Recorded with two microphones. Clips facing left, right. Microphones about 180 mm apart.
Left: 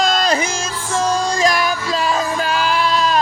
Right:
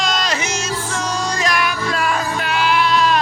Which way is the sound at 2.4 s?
40° left (ahead or behind).